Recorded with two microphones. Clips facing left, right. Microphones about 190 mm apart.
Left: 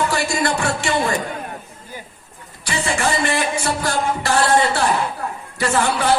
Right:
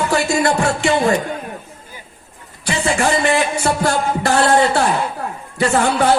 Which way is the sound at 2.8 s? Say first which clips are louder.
Right 4 dB; 50° right (ahead or behind).